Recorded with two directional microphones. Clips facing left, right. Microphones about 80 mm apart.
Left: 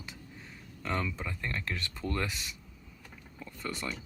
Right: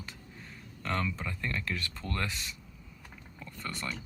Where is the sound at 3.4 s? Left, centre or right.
Centre.